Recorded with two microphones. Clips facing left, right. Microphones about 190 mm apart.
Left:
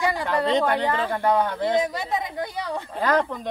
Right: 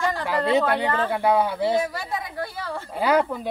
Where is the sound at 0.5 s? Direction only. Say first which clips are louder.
Right 2 dB; 10° right (ahead or behind).